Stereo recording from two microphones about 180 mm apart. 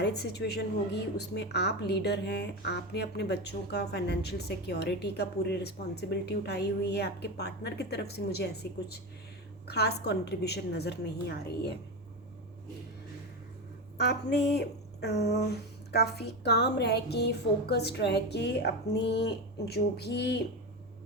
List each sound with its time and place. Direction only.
0.0 s a woman's voice: 65° left (ahead or behind)
9.6 s a woman's voice: 65° left (ahead or behind)
14.0 s a woman's voice: 65° left (ahead or behind)